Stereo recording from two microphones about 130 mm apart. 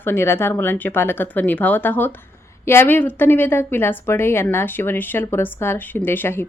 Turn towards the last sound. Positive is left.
turn(degrees=15)  # may be behind; listen again after turning